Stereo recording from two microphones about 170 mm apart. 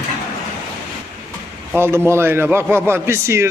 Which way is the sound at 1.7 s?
15° right (ahead or behind).